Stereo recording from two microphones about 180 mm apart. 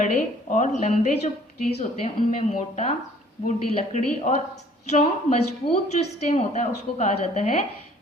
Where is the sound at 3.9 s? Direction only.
40° left (ahead or behind).